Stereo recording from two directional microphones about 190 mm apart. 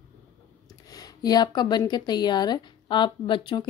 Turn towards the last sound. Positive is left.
turn(degrees=25)  # may be behind; listen again after turning